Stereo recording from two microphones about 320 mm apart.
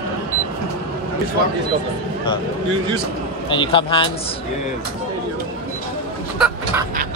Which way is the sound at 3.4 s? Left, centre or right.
Centre.